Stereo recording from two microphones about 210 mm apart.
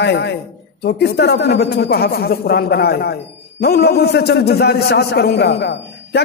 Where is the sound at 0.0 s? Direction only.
55° left (ahead or behind).